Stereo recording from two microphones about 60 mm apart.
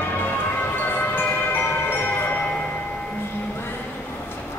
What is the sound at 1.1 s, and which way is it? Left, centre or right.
Emergency vehicle, left.